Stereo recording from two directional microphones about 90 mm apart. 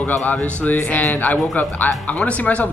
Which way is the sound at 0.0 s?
20° left (ahead or behind).